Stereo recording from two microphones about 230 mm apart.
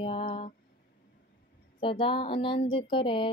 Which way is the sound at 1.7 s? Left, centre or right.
Left.